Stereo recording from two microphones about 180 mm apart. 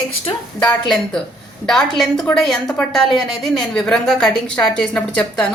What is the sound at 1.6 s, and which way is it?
Speech, centre (ahead or behind).